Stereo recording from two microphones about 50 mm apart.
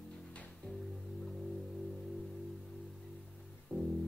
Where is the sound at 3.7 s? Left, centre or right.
Centre.